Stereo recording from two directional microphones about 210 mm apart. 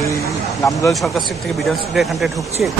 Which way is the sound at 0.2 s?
15° left (ahead or behind).